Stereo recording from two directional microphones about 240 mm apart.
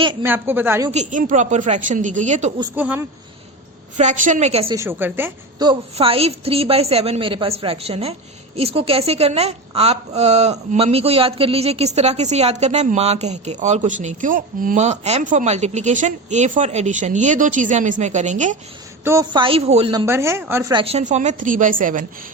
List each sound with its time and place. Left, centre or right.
0.0 s a woman's voice: centre
0.3 s speech: centre
0.9 s a woman's voice: right
2.7 s speech: centre
3.9 s a woman's voice: right
4.7 s a woman's voice: centre; by 18.5 s right
19.0 s a woman's voice: centre
20.1 s speech: centre
20.8 s a woman's voice: right